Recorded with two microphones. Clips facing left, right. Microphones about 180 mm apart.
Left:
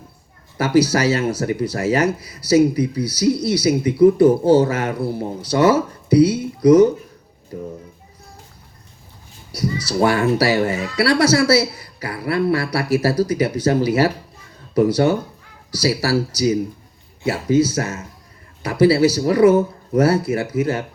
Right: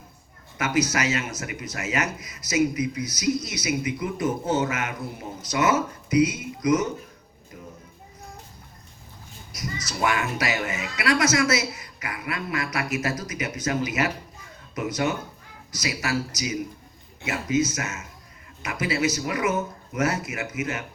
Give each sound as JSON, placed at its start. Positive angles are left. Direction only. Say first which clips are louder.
{"t": 0.5, "sound": "speech", "louder": "left 8 dB", "side_deg": 35}
{"t": 9.7, "sound": "speech", "louder": "left 8 dB", "side_deg": 30}